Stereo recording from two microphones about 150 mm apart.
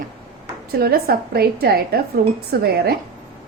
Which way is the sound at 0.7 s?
90° right.